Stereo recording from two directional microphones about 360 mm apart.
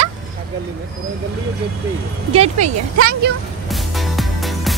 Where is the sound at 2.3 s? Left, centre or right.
Centre.